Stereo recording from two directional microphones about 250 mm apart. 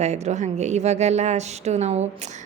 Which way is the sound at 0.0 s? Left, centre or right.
Right.